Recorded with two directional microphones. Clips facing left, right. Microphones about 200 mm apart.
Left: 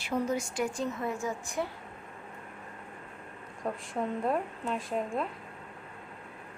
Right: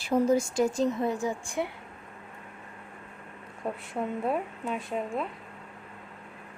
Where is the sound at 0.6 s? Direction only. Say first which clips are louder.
Right 6 dB; 40° right (ahead or behind).